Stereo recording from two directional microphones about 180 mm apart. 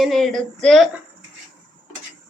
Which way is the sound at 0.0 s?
Centre (ahead or behind).